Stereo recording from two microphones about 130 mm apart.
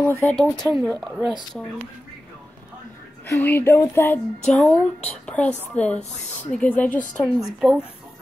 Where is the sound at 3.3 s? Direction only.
15° left (ahead or behind).